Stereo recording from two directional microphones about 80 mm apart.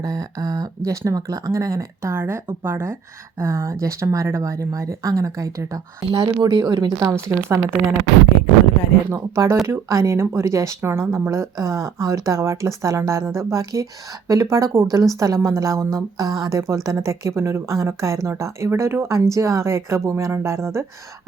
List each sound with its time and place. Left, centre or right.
0.0 s speech: right
6.1 s speech: right
7.0 s speech: right
9.0 s speech: right
10.8 s speech: right